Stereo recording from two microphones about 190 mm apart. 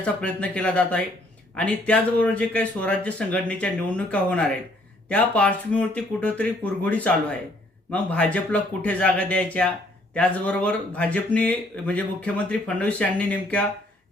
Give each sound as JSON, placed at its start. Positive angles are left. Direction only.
{"t": 0.0, "sound": "speech", "side_deg": 5}